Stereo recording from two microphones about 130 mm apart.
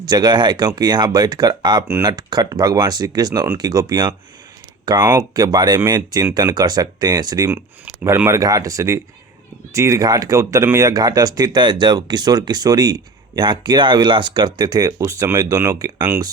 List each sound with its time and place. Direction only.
0.0 s speech: 30° right (ahead or behind)
7.5 s speech: 10° right (ahead or behind); by 16.0 s 25° right (ahead or behind)